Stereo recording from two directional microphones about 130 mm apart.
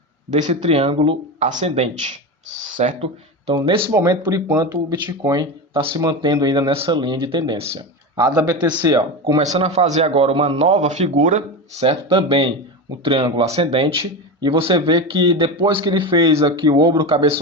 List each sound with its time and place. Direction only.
0.3 s speech: 65° right (ahead or behind); by 1.1 s 45° right (ahead or behind)
1.4 s speech: 70° right (ahead or behind)
3.5 s speech: 35° right (ahead or behind)
6.7 s speech: 45° right (ahead or behind)
8.1 s speech: 30° right (ahead or behind)
9.4 s a man's voice: 60° right (ahead or behind)
10.6 s speech: 65° right (ahead or behind)
11.8 s a man's voice: 45° right (ahead or behind)